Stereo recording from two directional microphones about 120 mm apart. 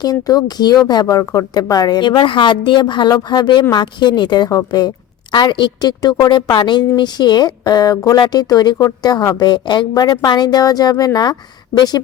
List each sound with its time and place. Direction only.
0.0 s a woman's voice: 35° left (ahead or behind)